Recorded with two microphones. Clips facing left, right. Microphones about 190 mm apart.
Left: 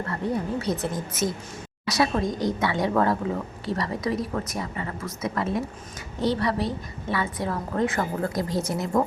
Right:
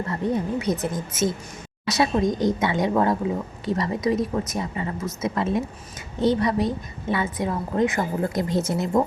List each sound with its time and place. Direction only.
0.1 s a woman's voice: 20° right (ahead or behind)